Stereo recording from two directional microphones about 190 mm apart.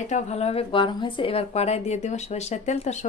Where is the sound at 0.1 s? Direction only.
35° left (ahead or behind).